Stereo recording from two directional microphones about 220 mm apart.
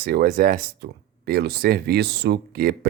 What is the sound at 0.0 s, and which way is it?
Speech, 45° right (ahead or behind).